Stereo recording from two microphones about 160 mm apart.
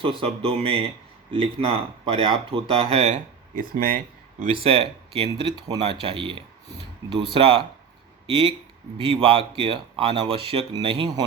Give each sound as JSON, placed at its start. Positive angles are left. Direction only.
{"t": 0.0, "sound": "speech", "side_deg": -35}
{"t": 3.5, "sound": "speech", "side_deg": -60}
{"t": 4.6, "sound": "speech", "side_deg": -40}